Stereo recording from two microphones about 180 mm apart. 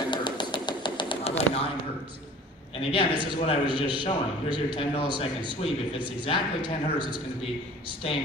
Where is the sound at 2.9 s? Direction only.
25° left (ahead or behind).